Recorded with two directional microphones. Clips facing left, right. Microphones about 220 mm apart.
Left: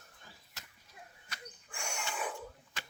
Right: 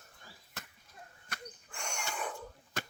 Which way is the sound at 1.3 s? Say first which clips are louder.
Right 4 dB; 50° right (ahead or behind).